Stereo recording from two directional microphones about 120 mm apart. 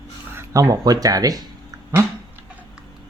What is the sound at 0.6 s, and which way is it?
Speech, 35° right (ahead or behind).